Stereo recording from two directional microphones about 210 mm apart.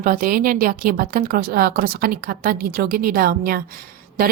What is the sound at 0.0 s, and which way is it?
A woman's voice, 40° right (ahead or behind).